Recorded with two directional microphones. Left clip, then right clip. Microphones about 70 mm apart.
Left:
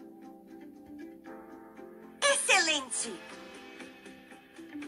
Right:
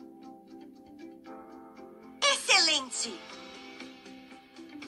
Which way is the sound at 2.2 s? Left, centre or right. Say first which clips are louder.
Right 1 dB; right.